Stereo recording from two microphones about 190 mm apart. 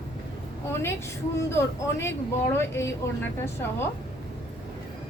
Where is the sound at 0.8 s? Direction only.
15° left (ahead or behind).